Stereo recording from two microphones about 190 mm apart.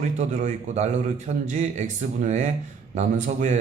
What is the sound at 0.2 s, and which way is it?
A man's voice, 40° right (ahead or behind).